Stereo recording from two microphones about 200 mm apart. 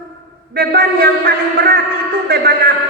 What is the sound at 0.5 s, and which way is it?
Speech, 50° right (ahead or behind).